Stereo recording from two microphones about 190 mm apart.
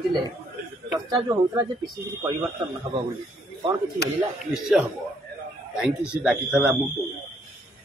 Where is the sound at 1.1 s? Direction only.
20° right (ahead or behind).